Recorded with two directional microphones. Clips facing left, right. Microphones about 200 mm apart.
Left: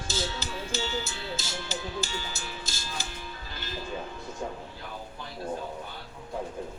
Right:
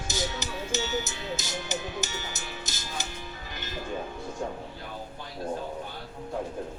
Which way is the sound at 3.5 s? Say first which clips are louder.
Right 1 dB; 20° right (ahead or behind).